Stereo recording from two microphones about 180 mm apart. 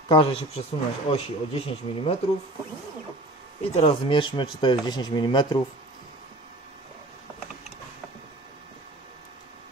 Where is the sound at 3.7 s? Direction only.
30° left (ahead or behind).